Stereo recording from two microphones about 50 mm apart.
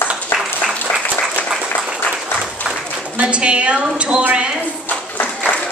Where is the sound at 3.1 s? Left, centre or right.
Right.